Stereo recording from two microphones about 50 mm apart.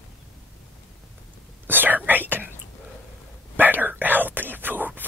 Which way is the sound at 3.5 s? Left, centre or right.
Right.